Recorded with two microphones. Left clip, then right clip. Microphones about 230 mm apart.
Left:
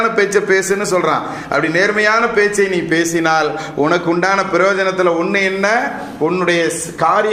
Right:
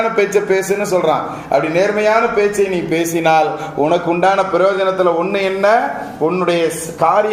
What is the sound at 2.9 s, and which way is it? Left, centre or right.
A man's voice, left.